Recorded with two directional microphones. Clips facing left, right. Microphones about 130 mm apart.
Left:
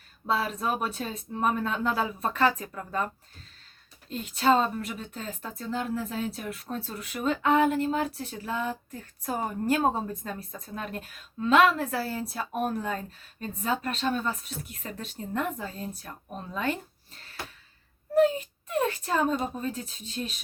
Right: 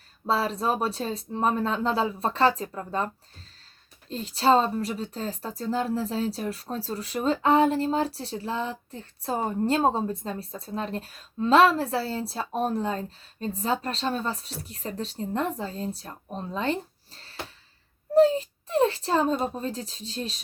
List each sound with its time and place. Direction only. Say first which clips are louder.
0.3 s speech: right 3 dB; 35° right (ahead or behind)
4.1 s speech: right 2 dB; 35° right (ahead or behind)